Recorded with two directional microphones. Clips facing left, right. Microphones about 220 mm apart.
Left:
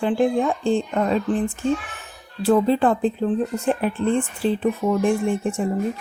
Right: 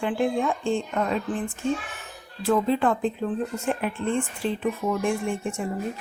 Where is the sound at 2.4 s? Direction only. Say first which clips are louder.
Left 5 dB; 35° left (ahead or behind).